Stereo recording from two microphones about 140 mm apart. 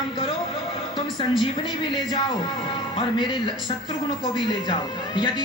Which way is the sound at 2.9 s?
35° left (ahead or behind).